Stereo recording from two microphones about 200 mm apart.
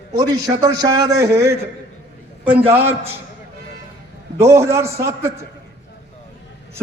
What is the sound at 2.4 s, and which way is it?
Speech, 25° right (ahead or behind).